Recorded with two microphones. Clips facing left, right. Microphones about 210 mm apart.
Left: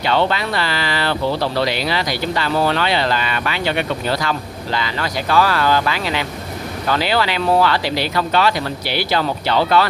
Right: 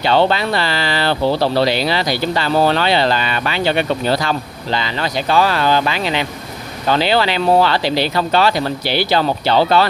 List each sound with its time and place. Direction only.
0.0 s speech: 30° right (ahead or behind)